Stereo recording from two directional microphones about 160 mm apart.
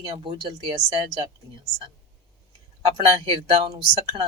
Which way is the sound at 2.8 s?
30° right (ahead or behind).